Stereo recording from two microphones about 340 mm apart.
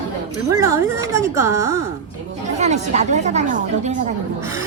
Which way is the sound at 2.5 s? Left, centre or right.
Centre.